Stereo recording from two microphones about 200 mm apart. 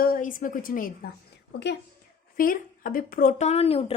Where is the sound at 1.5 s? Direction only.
60° left (ahead or behind).